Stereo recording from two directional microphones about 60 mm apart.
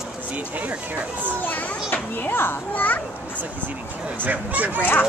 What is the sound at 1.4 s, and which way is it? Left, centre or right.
A child's voice, left.